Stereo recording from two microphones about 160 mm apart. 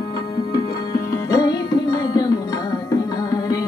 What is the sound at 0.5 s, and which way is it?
Music, 20° left (ahead or behind).